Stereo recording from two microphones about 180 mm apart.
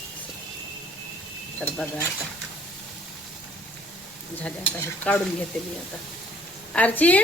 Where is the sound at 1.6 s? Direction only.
5° left (ahead or behind).